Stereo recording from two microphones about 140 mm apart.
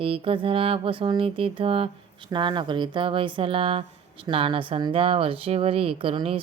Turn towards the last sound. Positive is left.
turn(degrees=-40)  # may be behind; listen again after turning